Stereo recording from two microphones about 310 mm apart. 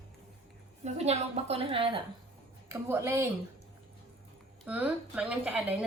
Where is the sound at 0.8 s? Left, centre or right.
Right.